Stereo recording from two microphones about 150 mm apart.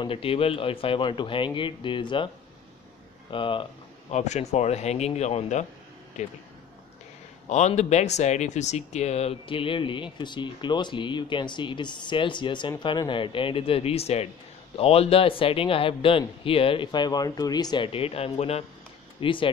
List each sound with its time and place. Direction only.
0.0 s speech: 35° left (ahead or behind)
4.1 s speech: 50° left (ahead or behind)
7.4 s speech: 50° left (ahead or behind)